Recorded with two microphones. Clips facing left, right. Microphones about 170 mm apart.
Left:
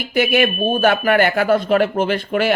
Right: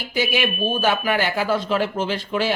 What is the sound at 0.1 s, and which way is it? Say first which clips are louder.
Speech: left 6 dB; 60° left (ahead or behind).